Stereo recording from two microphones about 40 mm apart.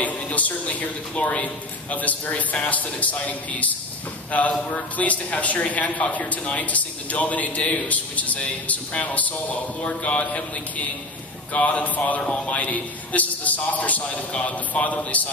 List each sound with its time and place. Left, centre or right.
0.0 s a man's voice: left